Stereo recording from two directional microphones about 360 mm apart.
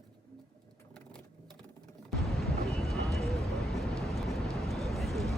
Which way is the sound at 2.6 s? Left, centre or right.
Centre.